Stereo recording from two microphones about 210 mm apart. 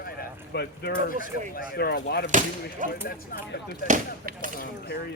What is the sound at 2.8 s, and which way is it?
Speech, 40° right (ahead or behind).